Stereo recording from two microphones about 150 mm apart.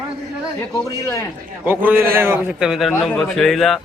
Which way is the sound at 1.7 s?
15° right (ahead or behind).